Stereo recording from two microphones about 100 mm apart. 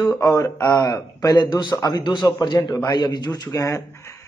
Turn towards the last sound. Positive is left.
turn(degrees=30)  # may be behind; listen again after turning